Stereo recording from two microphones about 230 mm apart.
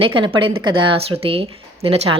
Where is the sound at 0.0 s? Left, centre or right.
Right.